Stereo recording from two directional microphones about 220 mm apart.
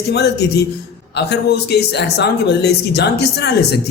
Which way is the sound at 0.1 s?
50° left (ahead or behind).